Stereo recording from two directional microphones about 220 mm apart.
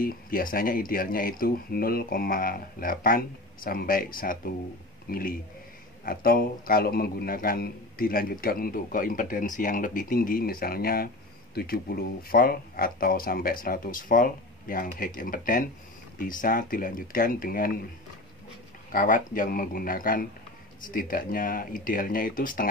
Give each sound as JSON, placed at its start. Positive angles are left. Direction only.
{"t": 0.0, "sound": "a man's voice", "side_deg": 40}
{"t": 18.9, "sound": "a man's voice", "side_deg": 40}